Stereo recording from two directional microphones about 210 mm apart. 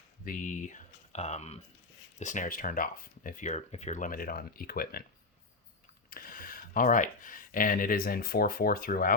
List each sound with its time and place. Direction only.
0.3 s speech: 35° left (ahead or behind)
6.1 s speech: 45° left (ahead or behind)